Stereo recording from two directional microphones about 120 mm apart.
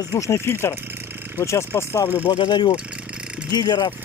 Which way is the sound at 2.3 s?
40° left (ahead or behind).